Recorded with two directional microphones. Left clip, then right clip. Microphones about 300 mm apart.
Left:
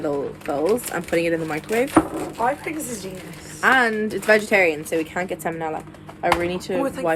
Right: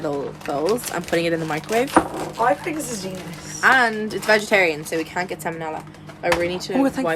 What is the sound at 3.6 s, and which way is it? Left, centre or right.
Speech, centre.